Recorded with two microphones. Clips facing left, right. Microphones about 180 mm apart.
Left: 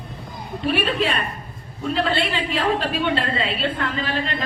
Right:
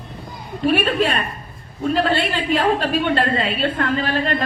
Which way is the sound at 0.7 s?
45° right (ahead or behind).